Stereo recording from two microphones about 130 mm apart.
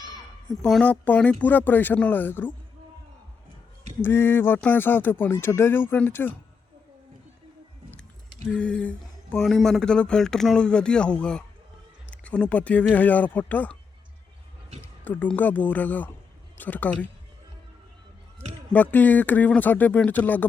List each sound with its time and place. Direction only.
0.6 s speech: 10° left (ahead or behind)
4.0 s speech: 20° left (ahead or behind)
8.5 s speech: 10° left (ahead or behind)
15.0 s speech: 15° left (ahead or behind)
18.7 s speech: 15° left (ahead or behind)